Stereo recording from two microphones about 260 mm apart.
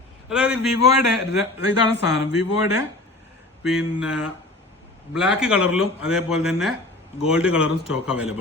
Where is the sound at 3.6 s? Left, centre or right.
Centre.